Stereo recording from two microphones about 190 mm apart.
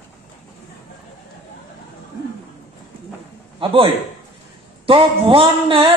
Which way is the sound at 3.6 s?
25° right (ahead or behind).